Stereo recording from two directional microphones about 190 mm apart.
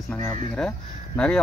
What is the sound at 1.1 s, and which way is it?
Speech, 5° left (ahead or behind).